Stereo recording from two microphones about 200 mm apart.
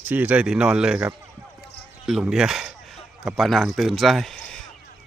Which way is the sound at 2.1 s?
Centre (ahead or behind).